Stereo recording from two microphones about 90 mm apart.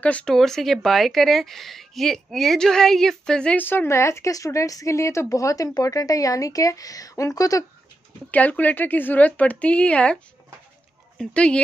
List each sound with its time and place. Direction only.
0.0 s speech: 10° left (ahead or behind)
3.5 s speech: 25° left (ahead or behind); by 7.6 s 40° left (ahead or behind)
8.3 s speech: 15° left (ahead or behind)
11.1 s speech: 10° left (ahead or behind)